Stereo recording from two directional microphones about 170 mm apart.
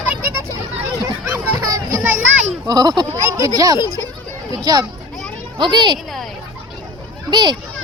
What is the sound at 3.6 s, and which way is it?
Speech, 20° right (ahead or behind).